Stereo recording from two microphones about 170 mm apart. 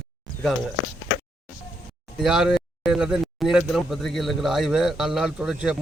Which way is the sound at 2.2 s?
5° right (ahead or behind).